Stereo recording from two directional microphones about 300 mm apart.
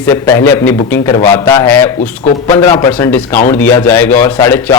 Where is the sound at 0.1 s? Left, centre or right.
Centre.